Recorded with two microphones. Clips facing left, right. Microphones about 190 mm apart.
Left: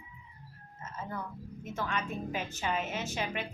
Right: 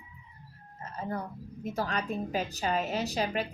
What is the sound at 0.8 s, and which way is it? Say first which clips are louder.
A woman's voice: right 4 dB; 35° right (ahead or behind).